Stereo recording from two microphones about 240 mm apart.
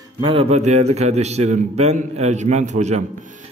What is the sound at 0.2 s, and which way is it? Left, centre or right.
A man's voice, right.